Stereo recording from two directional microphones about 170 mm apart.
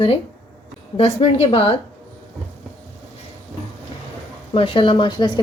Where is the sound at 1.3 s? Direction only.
40° left (ahead or behind).